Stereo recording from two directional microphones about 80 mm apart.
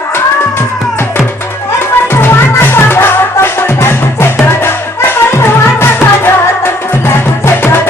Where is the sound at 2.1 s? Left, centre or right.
Left.